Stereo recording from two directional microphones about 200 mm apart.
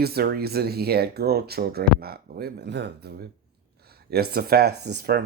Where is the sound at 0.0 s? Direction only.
50° right (ahead or behind).